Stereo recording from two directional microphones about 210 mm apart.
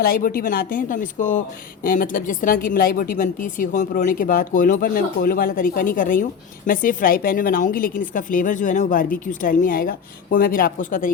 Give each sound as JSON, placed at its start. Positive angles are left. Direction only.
{"t": 0.0, "sound": "a woman's voice", "side_deg": 45}